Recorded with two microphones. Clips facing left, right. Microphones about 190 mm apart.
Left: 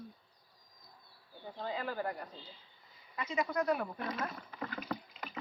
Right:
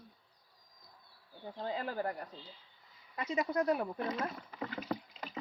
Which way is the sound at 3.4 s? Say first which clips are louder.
Right 1 dB; 25° right (ahead or behind).